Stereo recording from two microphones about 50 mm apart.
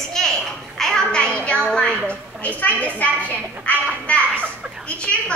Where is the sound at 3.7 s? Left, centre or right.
Left.